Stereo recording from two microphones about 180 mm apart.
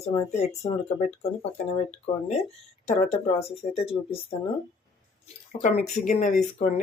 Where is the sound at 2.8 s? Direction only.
35° left (ahead or behind).